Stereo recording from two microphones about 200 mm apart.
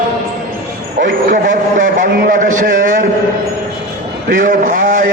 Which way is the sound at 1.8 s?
40° right (ahead or behind).